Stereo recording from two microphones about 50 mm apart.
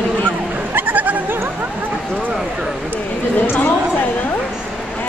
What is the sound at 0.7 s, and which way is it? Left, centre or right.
Goat, right.